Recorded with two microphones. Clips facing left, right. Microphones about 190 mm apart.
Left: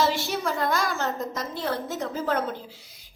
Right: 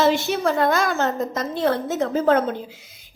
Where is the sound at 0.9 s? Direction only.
70° right (ahead or behind); by 2.5 s 85° right.